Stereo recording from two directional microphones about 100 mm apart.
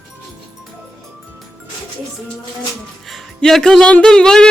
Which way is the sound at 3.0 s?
Centre (ahead or behind).